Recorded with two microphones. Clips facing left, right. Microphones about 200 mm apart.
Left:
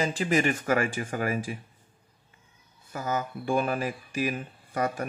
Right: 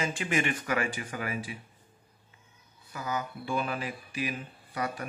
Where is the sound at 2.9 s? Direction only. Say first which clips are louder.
Left 4 dB; 45° left (ahead or behind).